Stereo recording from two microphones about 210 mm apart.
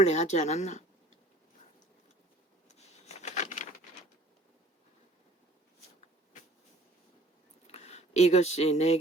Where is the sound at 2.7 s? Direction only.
30° left (ahead or behind).